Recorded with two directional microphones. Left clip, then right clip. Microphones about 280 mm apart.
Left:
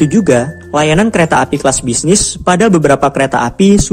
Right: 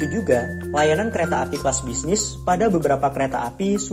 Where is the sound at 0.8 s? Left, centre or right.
Left.